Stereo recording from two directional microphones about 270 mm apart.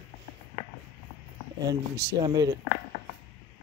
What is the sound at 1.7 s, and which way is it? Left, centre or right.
Speech, centre.